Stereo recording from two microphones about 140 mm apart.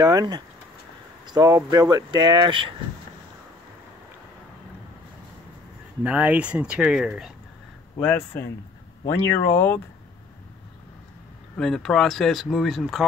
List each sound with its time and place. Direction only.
0.0 s speech: 30° right (ahead or behind)
6.0 s speech: 10° right (ahead or behind)
8.0 s speech: 15° left (ahead or behind)
11.5 s speech: 5° left (ahead or behind)